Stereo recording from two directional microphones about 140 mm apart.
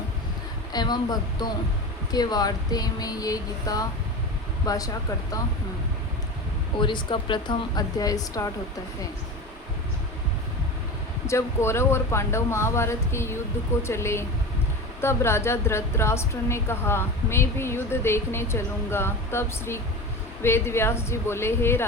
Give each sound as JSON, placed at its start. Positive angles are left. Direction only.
{"t": 0.7, "sound": "speech", "side_deg": 30}
{"t": 2.1, "sound": "speech", "side_deg": 30}
{"t": 6.7, "sound": "speech", "side_deg": 35}
{"t": 11.3, "sound": "a woman's voice", "side_deg": 20}